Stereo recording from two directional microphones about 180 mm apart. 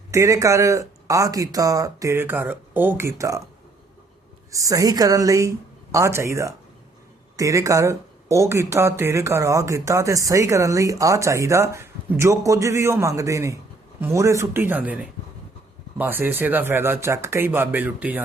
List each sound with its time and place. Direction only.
0.1 s speech: 15° right (ahead or behind)
4.5 s speech: 20° right (ahead or behind)